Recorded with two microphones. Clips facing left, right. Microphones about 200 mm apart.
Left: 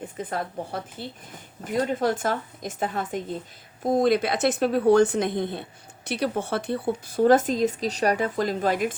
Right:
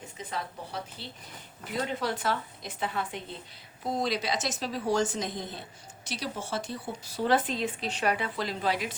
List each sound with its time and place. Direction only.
0.0 s a woman's voice: 55° left (ahead or behind)